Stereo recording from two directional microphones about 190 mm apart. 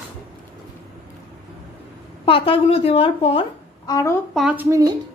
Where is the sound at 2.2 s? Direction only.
30° left (ahead or behind).